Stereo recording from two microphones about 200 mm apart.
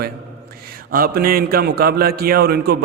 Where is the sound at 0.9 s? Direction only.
45° right (ahead or behind).